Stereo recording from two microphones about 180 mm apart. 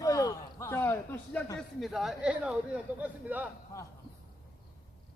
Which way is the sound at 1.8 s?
Centre (ahead or behind).